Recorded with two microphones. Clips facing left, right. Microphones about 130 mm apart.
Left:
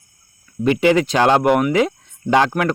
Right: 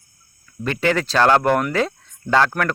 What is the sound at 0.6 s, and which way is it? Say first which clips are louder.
Speech: left 6 dB; 15° left (ahead or behind).